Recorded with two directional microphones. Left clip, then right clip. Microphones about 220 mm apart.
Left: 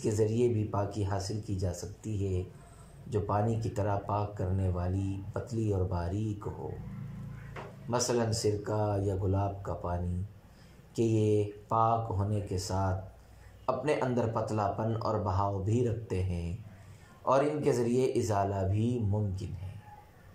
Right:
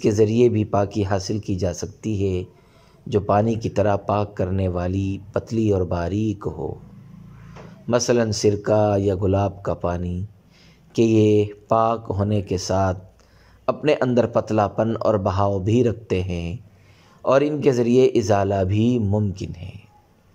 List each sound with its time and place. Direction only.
0.0 s speech: 40° right (ahead or behind)
7.9 s speech: 40° right (ahead or behind)